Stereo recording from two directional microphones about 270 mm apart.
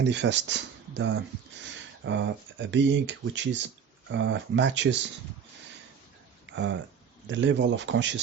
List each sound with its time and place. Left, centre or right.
0.0 s speech: right
7.3 s speech: right